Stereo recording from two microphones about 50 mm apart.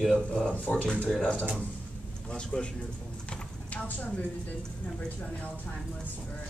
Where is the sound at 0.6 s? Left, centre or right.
Left.